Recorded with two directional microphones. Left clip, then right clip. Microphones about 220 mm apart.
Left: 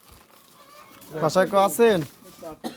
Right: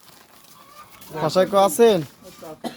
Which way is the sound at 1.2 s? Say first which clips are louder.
Right 2 dB; 15° left (ahead or behind).